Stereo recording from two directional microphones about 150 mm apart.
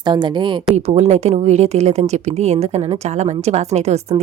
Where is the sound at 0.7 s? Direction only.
45° right (ahead or behind).